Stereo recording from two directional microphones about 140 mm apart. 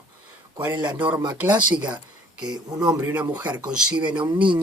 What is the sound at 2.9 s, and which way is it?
Speech, 10° right (ahead or behind).